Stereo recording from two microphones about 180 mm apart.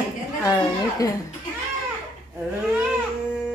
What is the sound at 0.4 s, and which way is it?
Speech, 20° left (ahead or behind).